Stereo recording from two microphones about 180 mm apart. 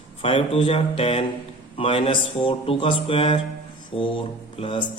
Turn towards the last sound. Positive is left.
turn(degrees=30)  # may be behind; listen again after turning